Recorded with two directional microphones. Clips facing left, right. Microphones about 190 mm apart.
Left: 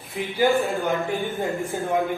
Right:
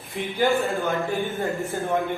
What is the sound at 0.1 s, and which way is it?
Speech, centre (ahead or behind).